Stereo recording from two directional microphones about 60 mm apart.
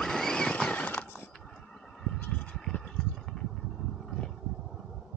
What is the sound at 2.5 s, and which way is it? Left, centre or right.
Vehicle, centre.